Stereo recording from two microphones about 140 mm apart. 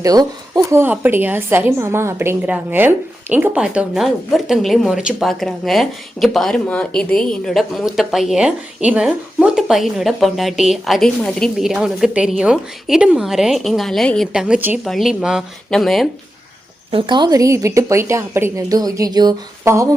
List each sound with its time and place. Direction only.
0.0 s a woman's voice: 25° right (ahead or behind)
0.8 s a woman's voice: 15° right (ahead or behind); by 16.0 s centre (ahead or behind)
16.9 s a woman's voice: 35° right (ahead or behind)